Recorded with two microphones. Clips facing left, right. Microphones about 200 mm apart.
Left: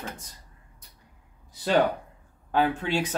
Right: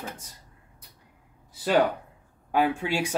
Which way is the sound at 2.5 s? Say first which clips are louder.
Even; 10° right (ahead or behind).